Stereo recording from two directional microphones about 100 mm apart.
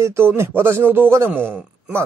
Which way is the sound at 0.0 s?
25° right (ahead or behind).